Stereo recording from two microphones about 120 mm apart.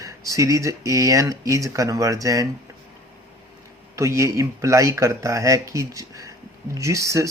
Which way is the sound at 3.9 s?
25° right (ahead or behind).